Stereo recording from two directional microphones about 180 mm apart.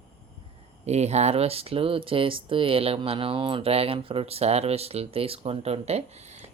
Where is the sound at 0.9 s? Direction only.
40° right (ahead or behind).